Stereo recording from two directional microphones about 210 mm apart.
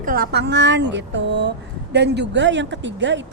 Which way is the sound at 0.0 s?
45° right (ahead or behind).